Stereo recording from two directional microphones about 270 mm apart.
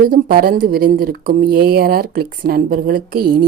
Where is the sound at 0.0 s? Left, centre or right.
Right.